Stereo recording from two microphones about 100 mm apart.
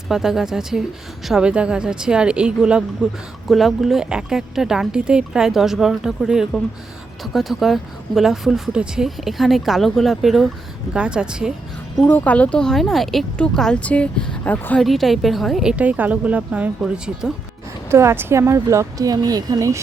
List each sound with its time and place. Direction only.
0.1 s speech: 5° right (ahead or behind)
12.0 s speech: 15° left (ahead or behind)
14.8 s speech: centre (ahead or behind)
15.7 s speech: 15° right (ahead or behind)
17.9 s speech: 25° right (ahead or behind)